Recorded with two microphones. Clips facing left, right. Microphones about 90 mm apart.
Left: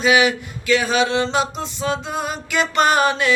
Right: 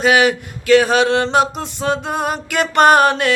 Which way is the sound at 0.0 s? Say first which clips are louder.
Right 2 dB; 55° right (ahead or behind).